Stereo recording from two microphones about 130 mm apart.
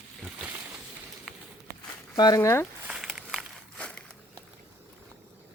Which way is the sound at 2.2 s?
30° left (ahead or behind).